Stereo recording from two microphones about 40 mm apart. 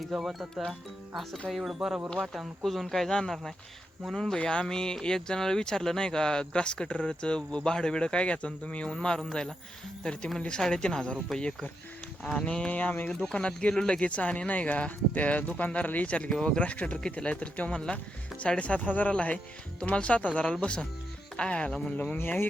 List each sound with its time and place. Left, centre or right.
0.1 s speech: centre
1.5 s speech: centre
2.6 s speech: centre
4.1 s speech: centre
12.2 s speech: centre
12.5 s speech: left
13.1 s speech: centre
14.0 s speech: left; by 17.9 s centre
17.9 s speech: left
18.9 s speech: left
22.2 s speech: left